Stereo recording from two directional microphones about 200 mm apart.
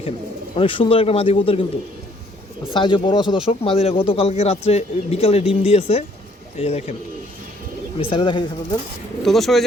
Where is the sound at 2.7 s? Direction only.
25° left (ahead or behind).